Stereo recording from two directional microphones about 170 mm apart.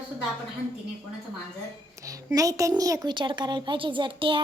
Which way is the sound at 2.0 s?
20° right (ahead or behind).